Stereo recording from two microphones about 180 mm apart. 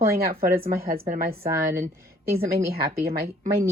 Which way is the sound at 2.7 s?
60° right (ahead or behind).